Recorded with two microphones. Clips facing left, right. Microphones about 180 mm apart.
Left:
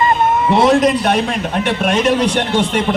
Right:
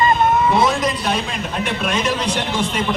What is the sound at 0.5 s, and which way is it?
A man's voice, 70° left (ahead or behind).